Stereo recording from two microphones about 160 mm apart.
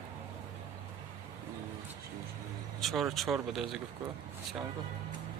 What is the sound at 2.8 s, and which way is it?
Speech, centre (ahead or behind).